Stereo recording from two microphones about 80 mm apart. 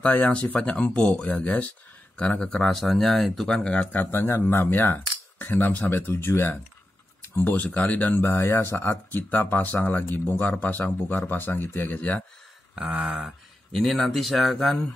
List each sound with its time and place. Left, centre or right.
0.0 s speech: centre
12.7 s a sound: centre
13.7 s speech: centre